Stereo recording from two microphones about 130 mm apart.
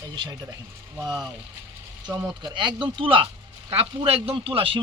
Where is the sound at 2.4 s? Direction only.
40° right (ahead or behind).